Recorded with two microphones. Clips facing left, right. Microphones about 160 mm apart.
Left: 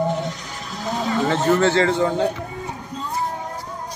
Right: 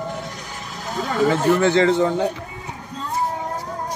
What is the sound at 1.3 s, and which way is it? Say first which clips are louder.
Speech: even; 15° right (ahead or behind).